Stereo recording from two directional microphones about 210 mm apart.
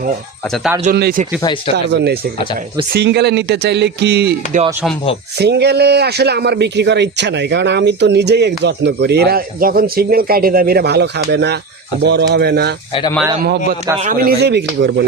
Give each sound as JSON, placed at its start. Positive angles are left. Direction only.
{"t": 0.9, "sound": "speech", "side_deg": -45}
{"t": 1.4, "sound": "speech", "side_deg": 20}
{"t": 1.7, "sound": "speech", "side_deg": -55}
{"t": 5.4, "sound": "speech", "side_deg": -50}
{"t": 12.9, "sound": "speech", "side_deg": 20}
{"t": 14.0, "sound": "speech", "side_deg": -40}